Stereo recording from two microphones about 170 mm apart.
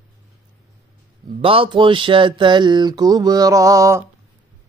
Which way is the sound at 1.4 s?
30° right (ahead or behind).